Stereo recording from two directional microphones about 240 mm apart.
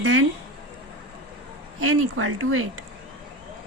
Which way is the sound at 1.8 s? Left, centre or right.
Right.